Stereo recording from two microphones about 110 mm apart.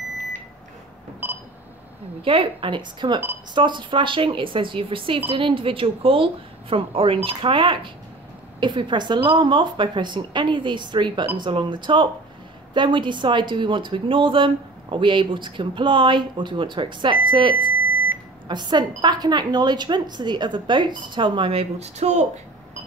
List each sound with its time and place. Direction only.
1.2 s pulse: 15° right (ahead or behind)
2.2 s a woman's voice: 55° right (ahead or behind)
17.6 s beep: 15° right (ahead or behind)
18.5 s a woman's voice: 40° right (ahead or behind); by 22.3 s 90° right